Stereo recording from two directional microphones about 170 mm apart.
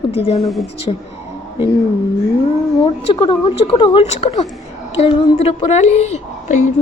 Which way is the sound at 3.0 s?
30° left (ahead or behind).